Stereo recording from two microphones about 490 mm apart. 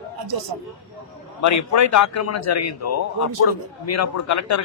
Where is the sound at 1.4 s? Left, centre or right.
Left.